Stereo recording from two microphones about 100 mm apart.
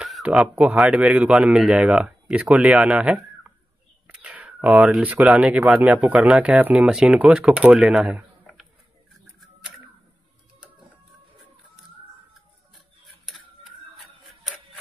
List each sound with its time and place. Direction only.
0.0 s speech: 5° right (ahead or behind)
4.1 s a sound: 10° right (ahead or behind)
5.3 s speech: 10° right (ahead or behind)
5.6 s speech: 25° right (ahead or behind)
5.9 s speech: 5° right (ahead or behind)